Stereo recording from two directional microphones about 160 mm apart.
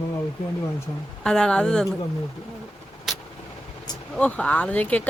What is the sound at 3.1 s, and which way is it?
Vehicle, centre (ahead or behind).